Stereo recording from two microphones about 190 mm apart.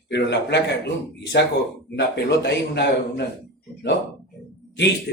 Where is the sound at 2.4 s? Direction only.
65° left (ahead or behind).